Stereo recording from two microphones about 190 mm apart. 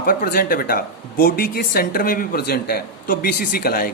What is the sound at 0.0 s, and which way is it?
Speech, 50° left (ahead or behind).